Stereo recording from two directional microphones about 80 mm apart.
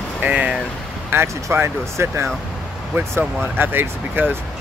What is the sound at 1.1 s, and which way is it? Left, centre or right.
Speech, right.